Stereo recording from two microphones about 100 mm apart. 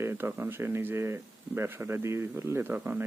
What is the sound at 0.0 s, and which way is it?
Speech, 25° right (ahead or behind).